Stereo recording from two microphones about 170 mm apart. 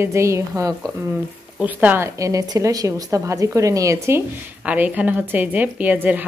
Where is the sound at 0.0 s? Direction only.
15° right (ahead or behind).